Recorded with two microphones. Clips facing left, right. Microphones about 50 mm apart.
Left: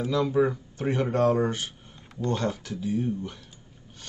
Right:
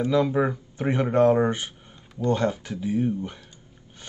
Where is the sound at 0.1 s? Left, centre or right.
Right.